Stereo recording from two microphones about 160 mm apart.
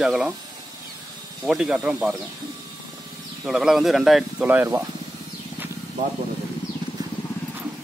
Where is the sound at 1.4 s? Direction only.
5° right (ahead or behind).